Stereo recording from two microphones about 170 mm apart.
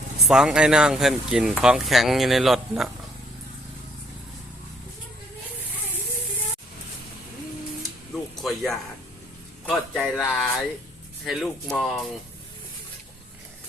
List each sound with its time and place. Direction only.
0.3 s speech: 5° right (ahead or behind)
8.4 s a sound: centre (ahead or behind)
9.6 s speech: centre (ahead or behind)